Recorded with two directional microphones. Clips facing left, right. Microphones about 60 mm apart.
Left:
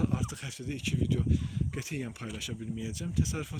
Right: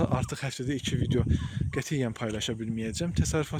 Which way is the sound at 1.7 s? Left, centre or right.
Right.